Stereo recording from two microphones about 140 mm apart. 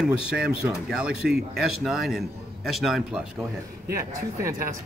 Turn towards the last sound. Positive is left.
turn(degrees=-25)  # may be behind; listen again after turning